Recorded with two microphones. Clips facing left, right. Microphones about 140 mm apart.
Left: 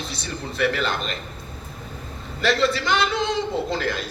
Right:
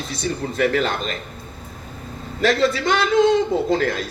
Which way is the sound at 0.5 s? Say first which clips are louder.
Right 2 dB; 40° right (ahead or behind).